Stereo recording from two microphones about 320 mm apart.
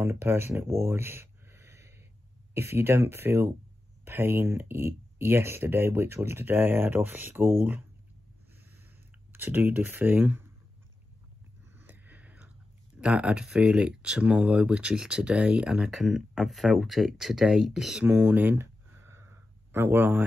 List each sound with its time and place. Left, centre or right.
0.0 s speech: centre
9.3 s speech: centre
11.7 s a sound: centre
13.0 s speech: centre